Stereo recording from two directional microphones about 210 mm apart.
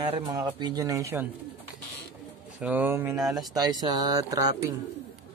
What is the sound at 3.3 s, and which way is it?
Speech, 20° right (ahead or behind).